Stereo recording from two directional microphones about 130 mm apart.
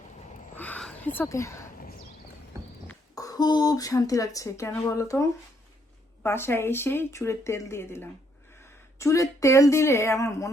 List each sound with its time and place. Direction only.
0.5 s a sound: 10° left (ahead or behind)
1.1 s speech: 20° left (ahead or behind)
3.2 s speech: 30° left (ahead or behind)